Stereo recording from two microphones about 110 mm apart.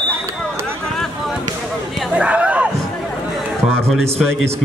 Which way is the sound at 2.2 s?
10° right (ahead or behind).